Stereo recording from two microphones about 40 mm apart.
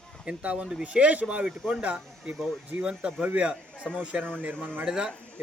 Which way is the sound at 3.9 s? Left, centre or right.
Centre.